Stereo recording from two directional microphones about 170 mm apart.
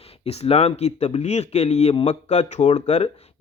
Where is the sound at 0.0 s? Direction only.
35° left (ahead or behind).